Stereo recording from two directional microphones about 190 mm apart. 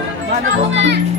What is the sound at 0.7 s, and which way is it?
Speech, 70° right (ahead or behind).